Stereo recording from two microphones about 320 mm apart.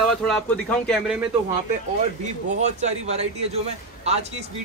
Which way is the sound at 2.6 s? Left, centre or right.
Right.